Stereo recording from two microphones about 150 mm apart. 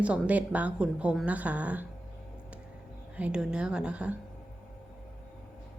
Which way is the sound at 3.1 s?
5° right (ahead or behind).